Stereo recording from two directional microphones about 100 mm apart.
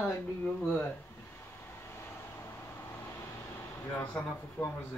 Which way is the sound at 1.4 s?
25° left (ahead or behind).